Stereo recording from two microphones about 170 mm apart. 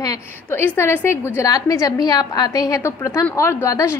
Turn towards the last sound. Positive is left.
turn(degrees=15)  # may be behind; listen again after turning